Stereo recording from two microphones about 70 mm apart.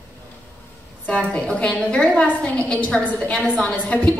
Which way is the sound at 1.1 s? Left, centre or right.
Centre.